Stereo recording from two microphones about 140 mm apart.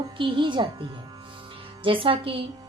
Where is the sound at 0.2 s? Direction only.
35° right (ahead or behind).